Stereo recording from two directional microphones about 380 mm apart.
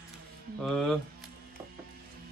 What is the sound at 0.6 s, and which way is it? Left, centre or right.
Speech, centre.